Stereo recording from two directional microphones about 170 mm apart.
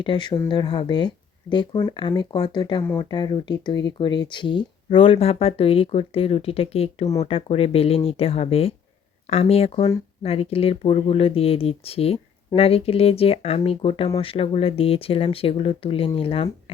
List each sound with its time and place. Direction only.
0.0 s speech: 25° left (ahead or behind)